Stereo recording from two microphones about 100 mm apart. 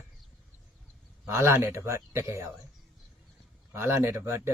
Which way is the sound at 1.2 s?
25° right (ahead or behind).